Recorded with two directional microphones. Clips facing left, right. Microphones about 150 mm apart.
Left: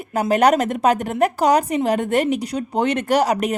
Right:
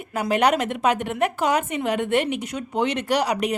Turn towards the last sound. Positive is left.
turn(degrees=45)  # may be behind; listen again after turning